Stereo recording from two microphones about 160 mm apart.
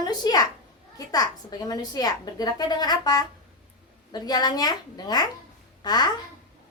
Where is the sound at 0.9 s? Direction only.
25° left (ahead or behind).